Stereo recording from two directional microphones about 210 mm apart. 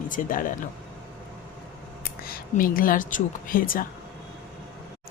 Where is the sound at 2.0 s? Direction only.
45° left (ahead or behind).